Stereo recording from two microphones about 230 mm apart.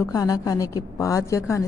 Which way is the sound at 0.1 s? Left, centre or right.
Centre.